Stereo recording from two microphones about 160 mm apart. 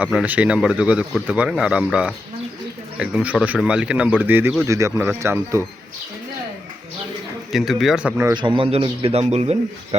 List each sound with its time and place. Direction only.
0.0 s speech: 5° right (ahead or behind)
7.5 s speech: centre (ahead or behind)
8.3 s a man's voice: 30° right (ahead or behind)